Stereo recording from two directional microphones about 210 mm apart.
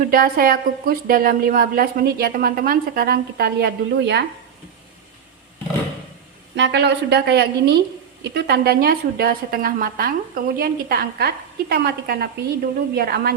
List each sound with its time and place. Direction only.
0.1 s a woman's voice: 45° right (ahead or behind)
6.6 s a woman's voice: 55° right (ahead or behind)